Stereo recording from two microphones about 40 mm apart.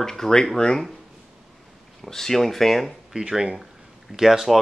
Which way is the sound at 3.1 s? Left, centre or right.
Right.